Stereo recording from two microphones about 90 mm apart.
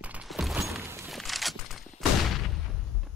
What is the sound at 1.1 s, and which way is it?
Fusillade, centre (ahead or behind).